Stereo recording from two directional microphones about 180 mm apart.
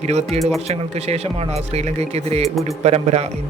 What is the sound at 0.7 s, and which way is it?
Speech, 35° right (ahead or behind).